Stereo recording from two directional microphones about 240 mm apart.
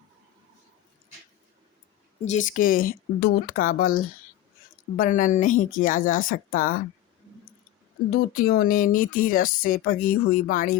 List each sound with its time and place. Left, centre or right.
2.2 s speech: left
8.3 s speech: left